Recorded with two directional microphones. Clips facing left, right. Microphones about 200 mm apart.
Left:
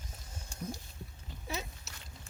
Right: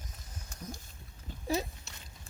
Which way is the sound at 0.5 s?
30° left (ahead or behind).